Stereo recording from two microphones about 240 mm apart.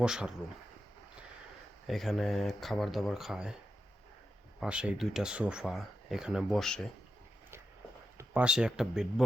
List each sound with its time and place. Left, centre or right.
0.0 s speech: centre
1.9 s speech: centre
4.6 s speech: centre
8.2 s speech: centre